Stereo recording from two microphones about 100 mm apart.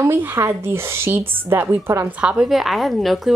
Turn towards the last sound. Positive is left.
turn(degrees=0)  # may be behind; listen again after turning